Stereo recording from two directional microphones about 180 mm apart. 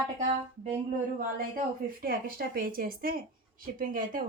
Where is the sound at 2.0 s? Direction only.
55° right (ahead or behind).